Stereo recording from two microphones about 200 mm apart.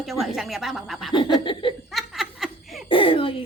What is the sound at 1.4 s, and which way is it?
Speech, 25° left (ahead or behind).